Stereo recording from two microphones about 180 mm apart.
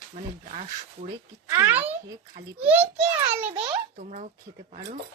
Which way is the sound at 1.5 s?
15° right (ahead or behind).